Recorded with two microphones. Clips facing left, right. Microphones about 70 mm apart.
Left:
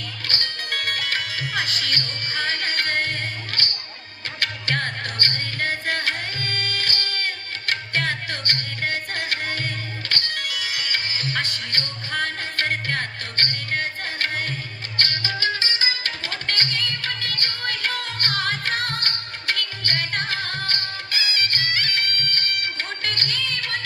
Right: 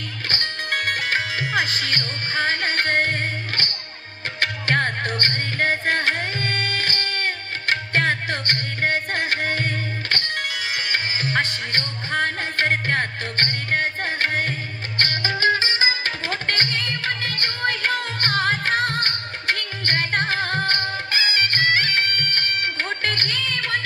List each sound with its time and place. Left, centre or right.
0.3 s music: right